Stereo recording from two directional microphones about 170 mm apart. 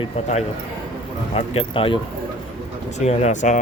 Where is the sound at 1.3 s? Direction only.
35° left (ahead or behind).